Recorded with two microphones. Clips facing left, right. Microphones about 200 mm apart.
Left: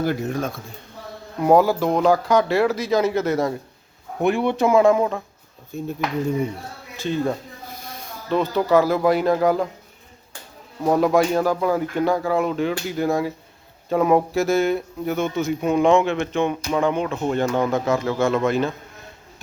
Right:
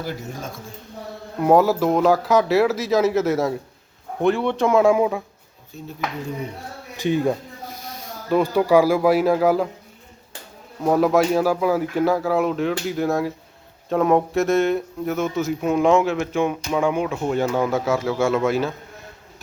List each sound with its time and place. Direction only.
0.0 s a man's voice: 60° left (ahead or behind)
1.4 s speech: centre (ahead or behind)
4.2 s speech: 10° left (ahead or behind)
4.8 s speech: 10° right (ahead or behind)
5.7 s speech: 50° left (ahead or behind)
6.9 s speech: 15° right (ahead or behind)
10.8 s speech: centre (ahead or behind)